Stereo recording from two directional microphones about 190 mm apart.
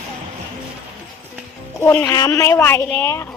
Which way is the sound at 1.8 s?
10° left (ahead or behind).